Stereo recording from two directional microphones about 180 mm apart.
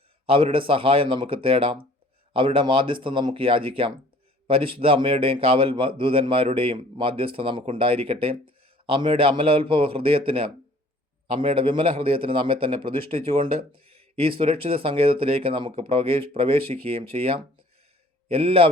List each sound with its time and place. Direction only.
0.3 s speech: 30° right (ahead or behind)